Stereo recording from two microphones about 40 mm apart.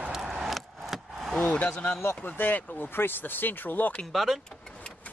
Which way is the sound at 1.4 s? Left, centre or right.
Left.